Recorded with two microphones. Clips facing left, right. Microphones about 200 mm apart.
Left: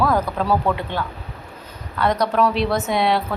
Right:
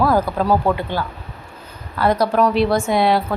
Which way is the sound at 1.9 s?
5° right (ahead or behind).